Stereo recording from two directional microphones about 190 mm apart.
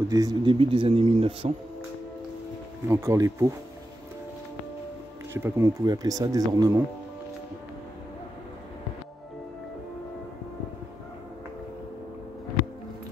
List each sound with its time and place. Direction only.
0.1 s a man's voice: 20° right (ahead or behind)
2.9 s speech: 15° right (ahead or behind)
5.3 s speech: 15° right (ahead or behind)